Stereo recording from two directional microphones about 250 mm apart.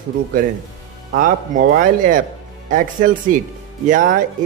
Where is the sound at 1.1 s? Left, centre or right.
Right.